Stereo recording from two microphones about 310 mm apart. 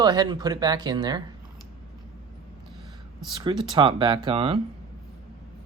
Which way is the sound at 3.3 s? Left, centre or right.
Centre.